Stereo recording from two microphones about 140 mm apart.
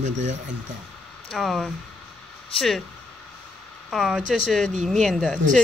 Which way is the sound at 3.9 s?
Centre (ahead or behind).